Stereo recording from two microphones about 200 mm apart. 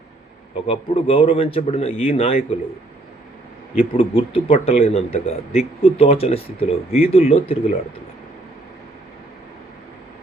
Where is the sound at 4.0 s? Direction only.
25° left (ahead or behind).